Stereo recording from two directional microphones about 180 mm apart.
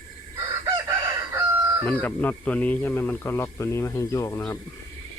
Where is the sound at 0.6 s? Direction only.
20° right (ahead or behind).